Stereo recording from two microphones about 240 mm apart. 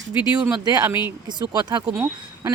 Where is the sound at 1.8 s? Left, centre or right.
Centre.